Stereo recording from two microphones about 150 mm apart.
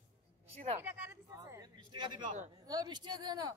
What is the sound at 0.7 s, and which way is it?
A man's voice, 20° right (ahead or behind).